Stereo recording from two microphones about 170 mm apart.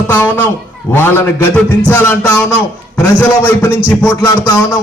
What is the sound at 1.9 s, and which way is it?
A man's voice, 15° left (ahead or behind).